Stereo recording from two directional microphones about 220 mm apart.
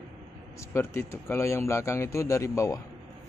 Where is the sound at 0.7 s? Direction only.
10° left (ahead or behind).